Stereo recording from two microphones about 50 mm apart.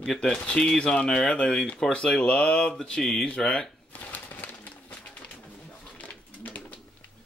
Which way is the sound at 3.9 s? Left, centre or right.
Left.